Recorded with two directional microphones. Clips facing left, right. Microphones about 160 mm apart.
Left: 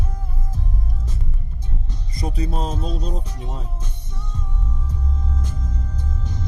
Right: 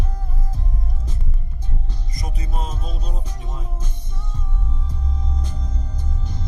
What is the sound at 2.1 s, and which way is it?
Music, 30° left (ahead or behind).